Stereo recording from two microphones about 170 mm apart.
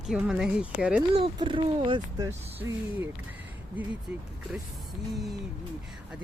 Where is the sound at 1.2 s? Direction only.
30° right (ahead or behind).